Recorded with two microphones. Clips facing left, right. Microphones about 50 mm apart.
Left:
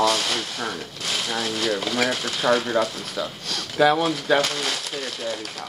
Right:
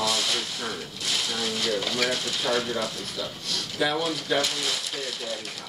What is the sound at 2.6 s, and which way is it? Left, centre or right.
Speech, left.